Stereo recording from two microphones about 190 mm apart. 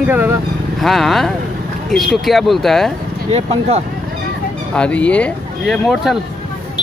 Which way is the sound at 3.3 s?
35° right (ahead or behind).